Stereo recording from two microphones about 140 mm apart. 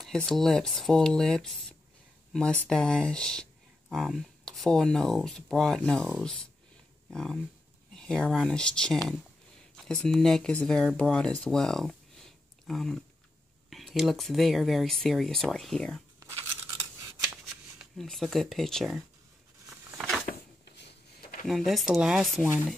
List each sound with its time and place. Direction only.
0.0 s speech: 5° left (ahead or behind)
16.2 s tearing: 20° right (ahead or behind)
17.7 s speech: centre (ahead or behind)
20.0 s a sound: 5° right (ahead or behind)
21.5 s speech: centre (ahead or behind)